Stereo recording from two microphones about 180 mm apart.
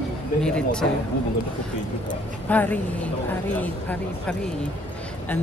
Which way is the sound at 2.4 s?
10° left (ahead or behind).